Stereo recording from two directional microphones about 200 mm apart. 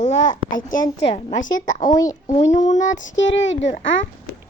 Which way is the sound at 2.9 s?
70° left (ahead or behind).